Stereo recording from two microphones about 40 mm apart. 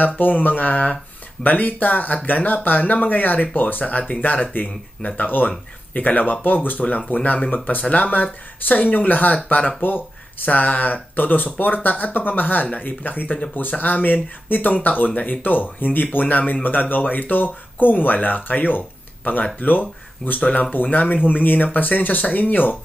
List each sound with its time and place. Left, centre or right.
0.0 s speech: left
7.5 s speech: left
9.8 s speech: left
20.3 s speech: left